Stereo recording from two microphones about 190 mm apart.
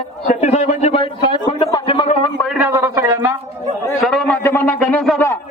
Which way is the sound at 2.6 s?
15° right (ahead or behind).